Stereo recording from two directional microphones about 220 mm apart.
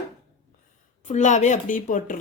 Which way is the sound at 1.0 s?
30° left (ahead or behind).